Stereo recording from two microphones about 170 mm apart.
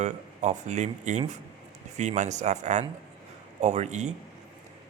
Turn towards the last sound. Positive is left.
turn(degrees=-40)  # may be behind; listen again after turning